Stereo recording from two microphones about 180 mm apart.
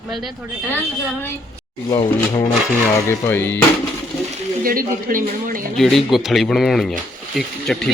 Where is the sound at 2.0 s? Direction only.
20° left (ahead or behind).